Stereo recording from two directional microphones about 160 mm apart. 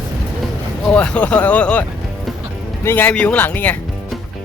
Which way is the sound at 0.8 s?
5° left (ahead or behind).